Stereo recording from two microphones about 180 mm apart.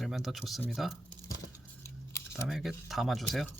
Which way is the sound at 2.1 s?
15° left (ahead or behind).